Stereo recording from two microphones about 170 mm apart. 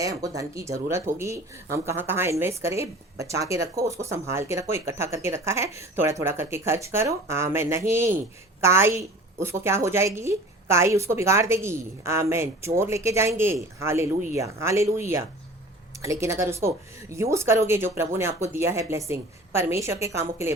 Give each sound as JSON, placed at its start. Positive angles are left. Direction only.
{"t": 0.0, "sound": "a woman's voice", "side_deg": -20}